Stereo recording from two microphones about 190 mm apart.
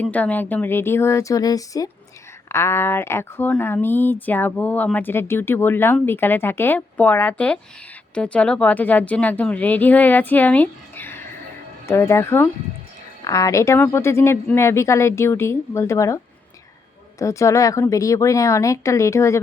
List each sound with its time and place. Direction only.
0.0 s speech: 10° left (ahead or behind)